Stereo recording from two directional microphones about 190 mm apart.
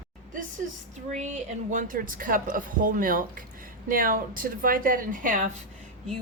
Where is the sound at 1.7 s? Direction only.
45° right (ahead or behind).